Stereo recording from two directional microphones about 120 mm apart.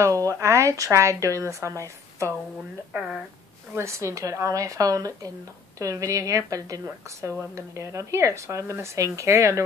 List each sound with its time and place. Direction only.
0.0 s a woman's voice: 30° right (ahead or behind)
2.9 s speech: 5° right (ahead or behind)
3.7 s a woman's voice: 25° right (ahead or behind)